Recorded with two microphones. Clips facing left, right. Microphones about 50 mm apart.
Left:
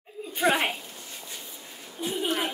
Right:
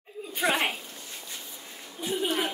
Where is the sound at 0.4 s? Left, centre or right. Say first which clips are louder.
Left 2 dB; centre.